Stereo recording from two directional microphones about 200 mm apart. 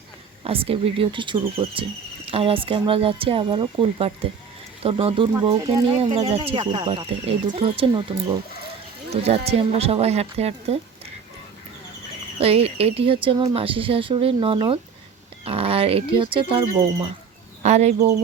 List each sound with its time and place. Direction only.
0.4 s speech: 30° right (ahead or behind)
9.2 s speech: 30° right (ahead or behind)
12.4 s speech: 30° right (ahead or behind)